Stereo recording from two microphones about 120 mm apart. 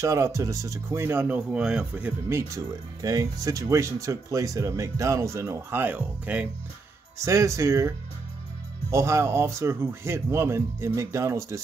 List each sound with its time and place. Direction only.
0.0 s speech: 25° right (ahead or behind)
2.3 s speech: 30° right (ahead or behind); by 6.5 s 10° right (ahead or behind)
7.2 s speech: 25° right (ahead or behind)
8.9 s speech: 25° right (ahead or behind)